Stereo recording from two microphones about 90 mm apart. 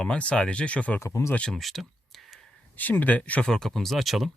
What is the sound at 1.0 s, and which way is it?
Speech, 30° left (ahead or behind).